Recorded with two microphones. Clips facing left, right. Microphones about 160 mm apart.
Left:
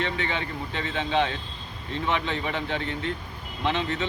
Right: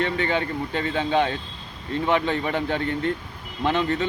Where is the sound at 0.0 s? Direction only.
45° right (ahead or behind).